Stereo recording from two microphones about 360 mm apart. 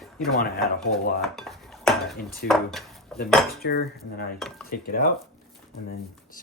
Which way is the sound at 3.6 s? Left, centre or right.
Left.